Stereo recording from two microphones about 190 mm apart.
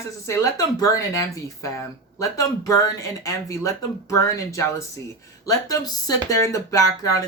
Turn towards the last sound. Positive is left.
turn(degrees=20)  # may be behind; listen again after turning